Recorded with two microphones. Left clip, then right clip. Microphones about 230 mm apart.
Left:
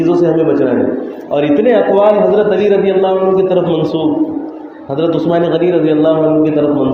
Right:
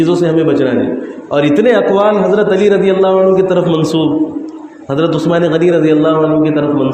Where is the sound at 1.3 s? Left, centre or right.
Right.